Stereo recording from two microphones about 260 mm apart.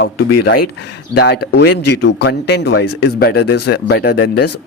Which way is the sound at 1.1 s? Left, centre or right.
Left.